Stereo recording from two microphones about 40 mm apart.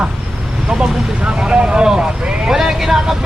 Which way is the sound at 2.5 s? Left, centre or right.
Centre.